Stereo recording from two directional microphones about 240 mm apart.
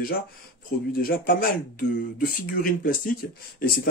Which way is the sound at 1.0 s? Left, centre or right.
Left.